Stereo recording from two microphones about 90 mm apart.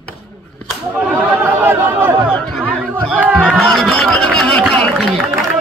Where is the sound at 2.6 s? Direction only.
10° left (ahead or behind).